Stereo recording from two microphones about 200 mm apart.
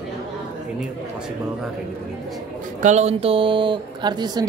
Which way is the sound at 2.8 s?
35° right (ahead or behind).